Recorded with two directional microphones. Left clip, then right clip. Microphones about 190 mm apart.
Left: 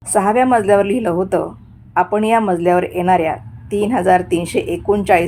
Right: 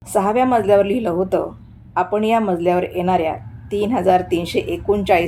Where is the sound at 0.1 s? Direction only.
20° left (ahead or behind).